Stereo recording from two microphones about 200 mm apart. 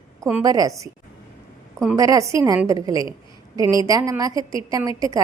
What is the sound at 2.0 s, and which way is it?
A woman's voice, 15° right (ahead or behind).